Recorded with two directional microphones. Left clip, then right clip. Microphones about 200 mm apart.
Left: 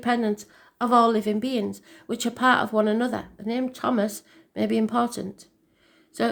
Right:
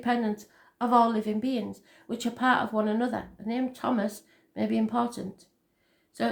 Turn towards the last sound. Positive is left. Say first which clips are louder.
# left 4 dB
turn(degrees=40)  # may be behind; listen again after turning